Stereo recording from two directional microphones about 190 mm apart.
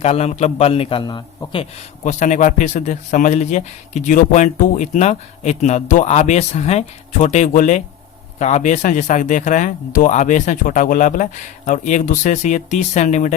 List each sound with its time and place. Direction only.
0.0 s a man's voice: 35° left (ahead or behind)
2.0 s a man's voice: 40° left (ahead or behind)